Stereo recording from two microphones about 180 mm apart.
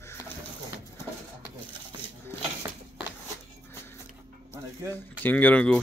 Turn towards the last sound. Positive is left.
turn(degrees=5)  # may be behind; listen again after turning